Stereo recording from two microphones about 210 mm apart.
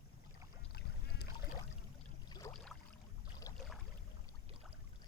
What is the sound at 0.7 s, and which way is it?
Boat, 50° left (ahead or behind).